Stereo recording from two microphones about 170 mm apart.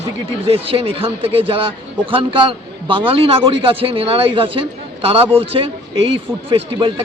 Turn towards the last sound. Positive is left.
turn(degrees=-35)  # may be behind; listen again after turning